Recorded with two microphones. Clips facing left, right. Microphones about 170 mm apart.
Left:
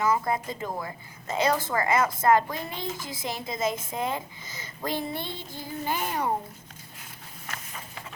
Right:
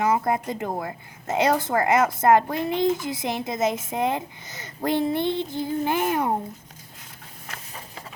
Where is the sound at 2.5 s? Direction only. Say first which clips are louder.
Right 9 dB; 60° right (ahead or behind).